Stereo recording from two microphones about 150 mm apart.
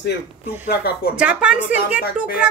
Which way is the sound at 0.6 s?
90° left.